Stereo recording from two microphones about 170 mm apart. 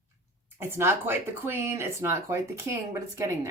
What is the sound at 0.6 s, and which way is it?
Speech, 15° right (ahead or behind).